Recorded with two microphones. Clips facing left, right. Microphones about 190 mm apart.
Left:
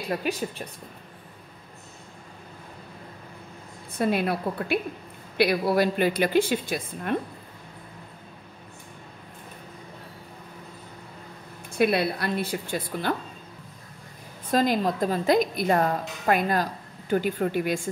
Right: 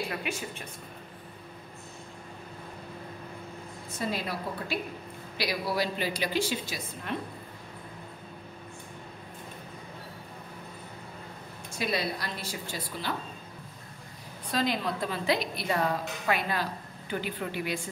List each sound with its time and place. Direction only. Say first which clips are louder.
0.2 s a woman's voice: left 7 dB; 35° left (ahead or behind)
3.9 s a woman's voice: left 8 dB; 60° left (ahead or behind)
11.7 s a woman's voice: left 8 dB; 60° left (ahead or behind)
14.5 s a woman's voice: left 6 dB; 45° left (ahead or behind)